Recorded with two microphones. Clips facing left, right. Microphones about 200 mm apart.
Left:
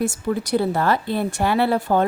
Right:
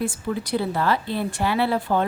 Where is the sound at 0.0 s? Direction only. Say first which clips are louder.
Left 4 dB; 45° left (ahead or behind).